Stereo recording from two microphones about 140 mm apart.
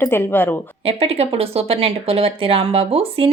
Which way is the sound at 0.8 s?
45° right (ahead or behind).